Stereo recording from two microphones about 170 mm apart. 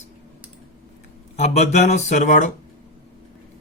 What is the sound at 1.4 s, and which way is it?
Speech, 45° left (ahead or behind).